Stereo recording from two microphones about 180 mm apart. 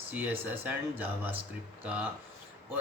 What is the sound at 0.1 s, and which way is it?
Speech, 10° right (ahead or behind).